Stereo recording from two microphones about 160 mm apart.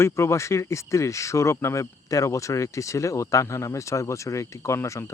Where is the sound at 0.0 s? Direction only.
20° left (ahead or behind).